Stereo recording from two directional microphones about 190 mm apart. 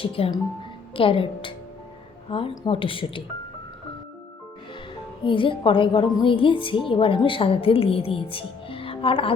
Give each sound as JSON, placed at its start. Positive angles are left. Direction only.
{"t": 0.0, "sound": "a woman's voice", "side_deg": 30}
{"t": 5.2, "sound": "a woman's voice", "side_deg": 25}